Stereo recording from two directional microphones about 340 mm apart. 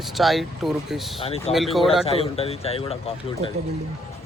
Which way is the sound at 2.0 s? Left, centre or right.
Centre.